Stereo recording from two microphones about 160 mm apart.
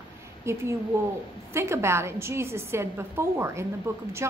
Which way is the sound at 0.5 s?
15° right (ahead or behind).